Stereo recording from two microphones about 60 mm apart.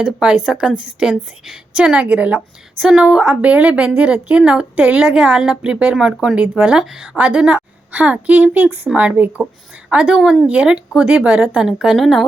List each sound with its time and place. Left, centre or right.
0.0 s a woman's voice: centre
6.8 s a woman's voice: centre
11.9 s speech: centre